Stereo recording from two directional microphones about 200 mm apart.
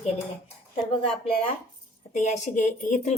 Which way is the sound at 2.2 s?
35° left (ahead or behind).